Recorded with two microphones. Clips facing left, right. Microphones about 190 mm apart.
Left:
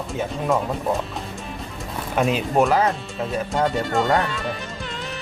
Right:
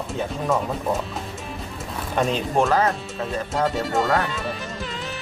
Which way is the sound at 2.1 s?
5° left (ahead or behind).